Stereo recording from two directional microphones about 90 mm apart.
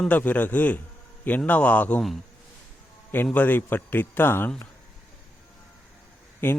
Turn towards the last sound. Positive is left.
turn(degrees=25)  # may be behind; listen again after turning